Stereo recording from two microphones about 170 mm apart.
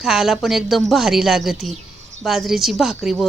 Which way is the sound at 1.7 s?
45° right (ahead or behind).